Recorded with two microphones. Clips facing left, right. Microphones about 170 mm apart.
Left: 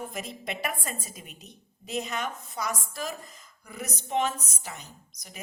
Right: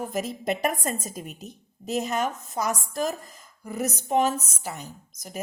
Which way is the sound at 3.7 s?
45° right (ahead or behind).